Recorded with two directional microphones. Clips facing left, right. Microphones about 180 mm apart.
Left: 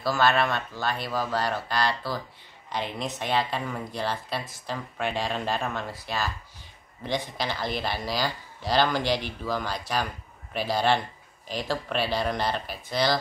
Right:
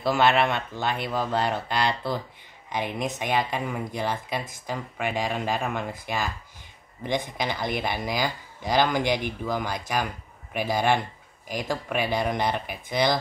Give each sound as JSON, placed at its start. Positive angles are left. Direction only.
{"t": 0.0, "sound": "speech", "side_deg": -20}